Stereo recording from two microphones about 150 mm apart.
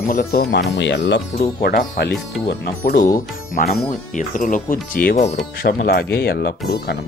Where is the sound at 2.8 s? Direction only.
70° left (ahead or behind).